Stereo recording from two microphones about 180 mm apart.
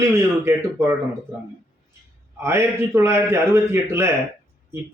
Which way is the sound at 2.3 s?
15° right (ahead or behind).